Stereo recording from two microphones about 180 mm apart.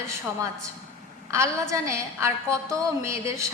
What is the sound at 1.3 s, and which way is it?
A woman's voice, 15° right (ahead or behind).